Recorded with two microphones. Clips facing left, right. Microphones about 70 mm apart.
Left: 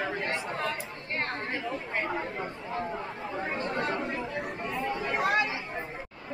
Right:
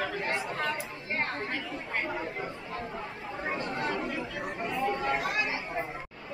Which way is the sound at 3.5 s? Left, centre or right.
Left.